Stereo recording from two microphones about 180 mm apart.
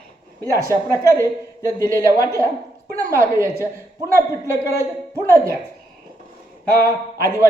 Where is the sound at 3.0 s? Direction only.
15° right (ahead or behind).